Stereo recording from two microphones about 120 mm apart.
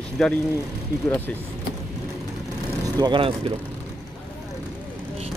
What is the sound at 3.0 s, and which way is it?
Speech, 45° right (ahead or behind).